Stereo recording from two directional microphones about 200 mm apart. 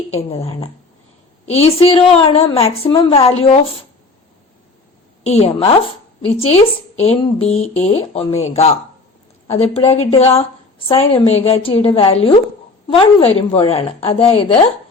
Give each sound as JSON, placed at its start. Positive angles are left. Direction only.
{"t": 0.1, "sound": "a woman's voice", "side_deg": 30}
{"t": 5.2, "sound": "a woman's voice", "side_deg": 30}
{"t": 9.9, "sound": "a woman's voice", "side_deg": 30}